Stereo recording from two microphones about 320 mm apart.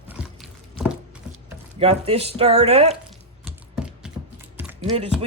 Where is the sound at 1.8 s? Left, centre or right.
Centre.